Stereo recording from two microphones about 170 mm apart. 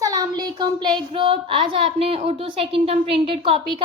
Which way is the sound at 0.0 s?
20° right (ahead or behind).